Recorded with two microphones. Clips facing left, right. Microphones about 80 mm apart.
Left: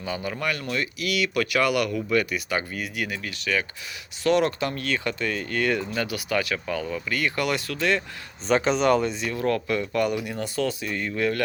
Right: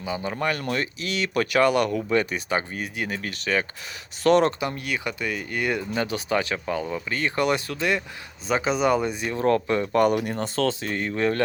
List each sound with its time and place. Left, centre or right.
0.0 s speech: right
3.1 s speech: right
4.6 s speech: centre
8.4 s speech: centre
9.2 s speech: right